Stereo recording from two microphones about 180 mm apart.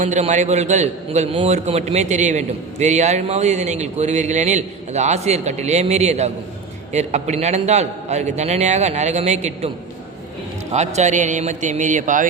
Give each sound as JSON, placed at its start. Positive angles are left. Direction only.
{"t": 0.0, "sound": "a man's voice", "side_deg": -40}
{"t": 10.7, "sound": "a man's voice", "side_deg": -40}